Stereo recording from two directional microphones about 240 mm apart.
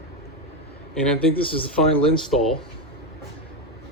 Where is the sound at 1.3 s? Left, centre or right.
Left.